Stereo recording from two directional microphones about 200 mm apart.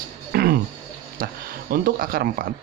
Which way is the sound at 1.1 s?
45° right (ahead or behind).